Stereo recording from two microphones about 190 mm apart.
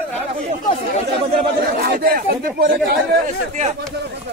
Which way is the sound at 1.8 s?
55° right (ahead or behind).